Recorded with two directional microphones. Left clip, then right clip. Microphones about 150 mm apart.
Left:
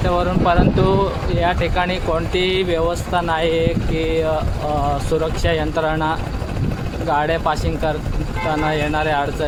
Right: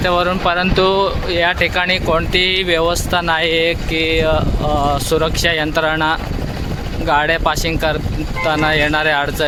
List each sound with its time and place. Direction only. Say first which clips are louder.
0.0 s speech: right 3 dB; 10° right (ahead or behind)